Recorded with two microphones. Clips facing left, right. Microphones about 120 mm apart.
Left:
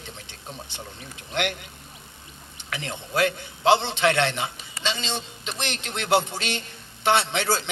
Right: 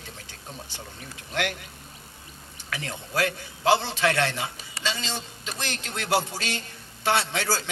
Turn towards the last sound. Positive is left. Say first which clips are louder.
# left 2 dB
turn(degrees=25)  # may be behind; listen again after turning